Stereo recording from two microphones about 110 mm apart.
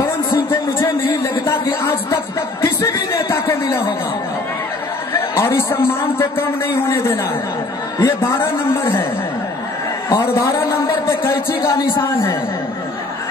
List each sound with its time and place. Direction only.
0.5 s a sound: 25° left (ahead or behind)
5.1 s a man's voice: 25° left (ahead or behind)
10.0 s a man's voice: 30° left (ahead or behind)